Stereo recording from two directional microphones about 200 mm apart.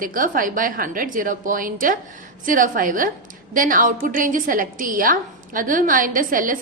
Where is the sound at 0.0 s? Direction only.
45° right (ahead or behind).